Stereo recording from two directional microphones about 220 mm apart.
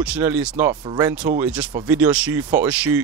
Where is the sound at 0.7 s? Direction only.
20° right (ahead or behind).